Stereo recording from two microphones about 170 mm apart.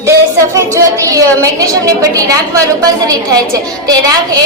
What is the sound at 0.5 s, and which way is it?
A woman's voice, 20° right (ahead or behind).